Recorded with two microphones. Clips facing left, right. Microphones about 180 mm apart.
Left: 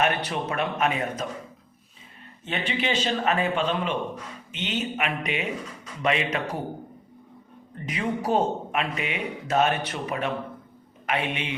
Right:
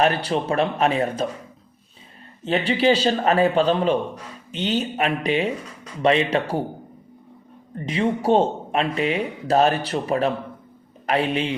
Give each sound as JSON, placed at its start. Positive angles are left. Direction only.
{"t": 0.0, "sound": "speech", "side_deg": -30}
{"t": 2.4, "sound": "speech", "side_deg": -35}
{"t": 7.9, "sound": "a man's voice", "side_deg": -30}